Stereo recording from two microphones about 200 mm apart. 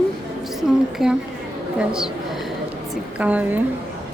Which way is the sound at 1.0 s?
Centre (ahead or behind).